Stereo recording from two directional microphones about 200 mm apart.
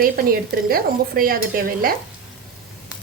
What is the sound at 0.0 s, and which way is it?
A woman's voice, 45° right (ahead or behind).